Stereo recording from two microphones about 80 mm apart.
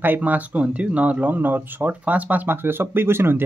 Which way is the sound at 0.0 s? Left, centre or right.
Right.